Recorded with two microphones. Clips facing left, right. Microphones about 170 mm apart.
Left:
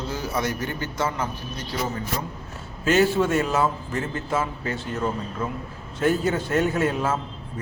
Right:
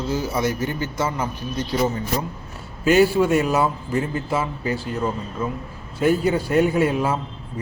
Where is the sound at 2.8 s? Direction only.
10° right (ahead or behind).